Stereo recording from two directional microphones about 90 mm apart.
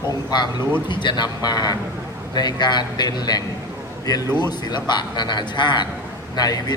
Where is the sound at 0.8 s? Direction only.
60° left (ahead or behind).